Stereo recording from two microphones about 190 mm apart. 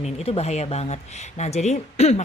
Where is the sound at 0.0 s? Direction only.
35° left (ahead or behind).